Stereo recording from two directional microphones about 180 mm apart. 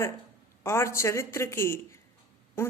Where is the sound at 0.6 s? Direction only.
15° left (ahead or behind).